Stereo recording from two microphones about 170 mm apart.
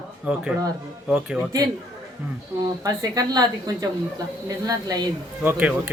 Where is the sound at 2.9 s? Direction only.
25° right (ahead or behind).